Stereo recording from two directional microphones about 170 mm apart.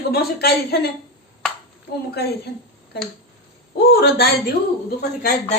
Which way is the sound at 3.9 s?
70° left (ahead or behind).